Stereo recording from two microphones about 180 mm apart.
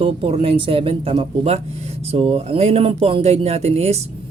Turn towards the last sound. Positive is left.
turn(degrees=-35)  # may be behind; listen again after turning